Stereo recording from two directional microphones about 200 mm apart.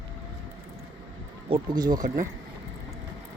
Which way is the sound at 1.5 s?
25° right (ahead or behind).